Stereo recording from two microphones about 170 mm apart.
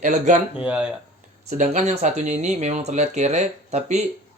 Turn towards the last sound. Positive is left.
turn(degrees=-40)  # may be behind; listen again after turning